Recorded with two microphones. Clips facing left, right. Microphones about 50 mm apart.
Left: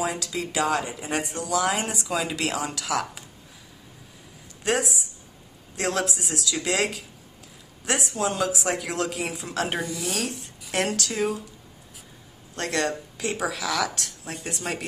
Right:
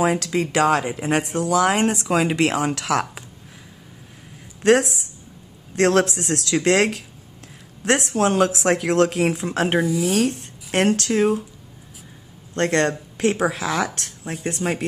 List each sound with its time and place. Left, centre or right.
0.0 s speech: right
4.6 s a woman's voice: right
9.8 s speech: centre
10.1 s speech: right
12.5 s speech: right
13.5 s speech: right